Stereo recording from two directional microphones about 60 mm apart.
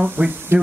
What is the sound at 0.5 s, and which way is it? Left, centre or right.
Speech, right.